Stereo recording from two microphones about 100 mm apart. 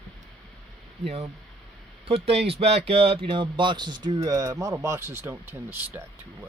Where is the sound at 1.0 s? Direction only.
90° right.